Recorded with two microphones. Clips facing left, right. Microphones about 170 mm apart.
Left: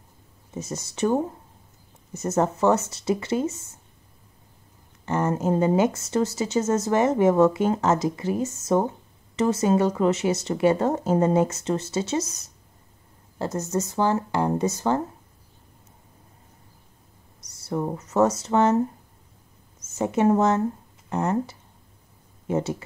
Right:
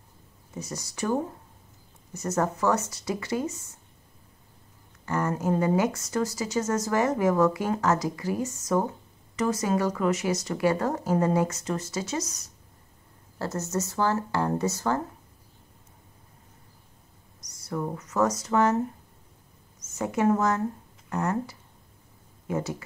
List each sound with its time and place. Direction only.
0.6 s speech: 25° left (ahead or behind)
5.0 s speech: 20° left (ahead or behind)
13.4 s speech: 15° left (ahead or behind)
17.5 s speech: 30° left (ahead or behind)
20.0 s speech: 25° left (ahead or behind)